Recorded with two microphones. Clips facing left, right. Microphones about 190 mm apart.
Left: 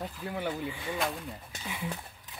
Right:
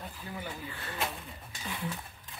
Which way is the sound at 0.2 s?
70° left (ahead or behind).